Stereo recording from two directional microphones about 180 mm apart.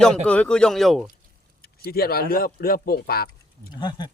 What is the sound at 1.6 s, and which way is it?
Speech, 55° left (ahead or behind).